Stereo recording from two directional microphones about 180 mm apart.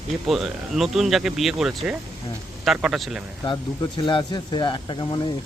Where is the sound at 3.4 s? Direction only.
25° left (ahead or behind).